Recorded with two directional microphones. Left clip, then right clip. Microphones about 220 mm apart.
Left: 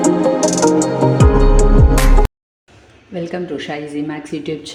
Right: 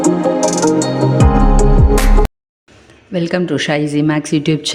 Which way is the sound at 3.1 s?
40° right (ahead or behind).